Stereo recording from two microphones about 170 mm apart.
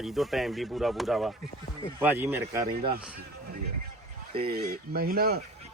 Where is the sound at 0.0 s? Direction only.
Centre (ahead or behind).